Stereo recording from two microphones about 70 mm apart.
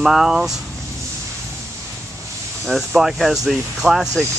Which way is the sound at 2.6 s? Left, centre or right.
Centre.